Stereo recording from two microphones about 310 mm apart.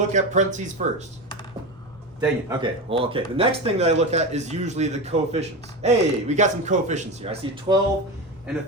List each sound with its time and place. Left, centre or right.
0.1 s speech: right
2.2 s speech: centre